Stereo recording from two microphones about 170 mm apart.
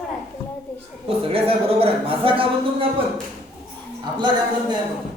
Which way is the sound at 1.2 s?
35° right (ahead or behind).